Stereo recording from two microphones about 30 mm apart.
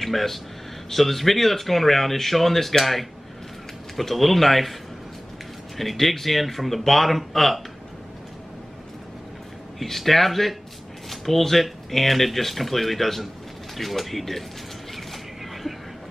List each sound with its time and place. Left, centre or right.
0.0 s speech: centre
5.8 s speech: centre
9.8 s speech: centre